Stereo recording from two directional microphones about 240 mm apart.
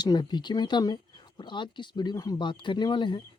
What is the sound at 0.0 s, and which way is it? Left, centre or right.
Speech, centre.